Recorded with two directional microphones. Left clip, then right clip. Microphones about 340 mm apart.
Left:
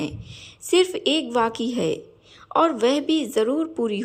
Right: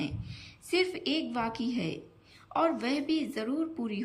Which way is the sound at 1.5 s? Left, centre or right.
Centre.